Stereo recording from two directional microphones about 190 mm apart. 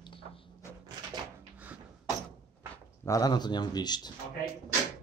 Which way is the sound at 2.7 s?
15° left (ahead or behind).